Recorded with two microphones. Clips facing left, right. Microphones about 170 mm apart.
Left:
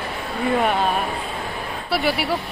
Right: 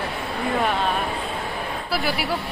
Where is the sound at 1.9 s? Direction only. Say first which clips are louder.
Left 4 dB; centre (ahead or behind).